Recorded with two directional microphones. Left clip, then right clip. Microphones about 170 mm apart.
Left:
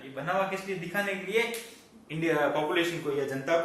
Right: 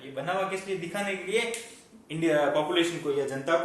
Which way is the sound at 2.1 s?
45° right (ahead or behind).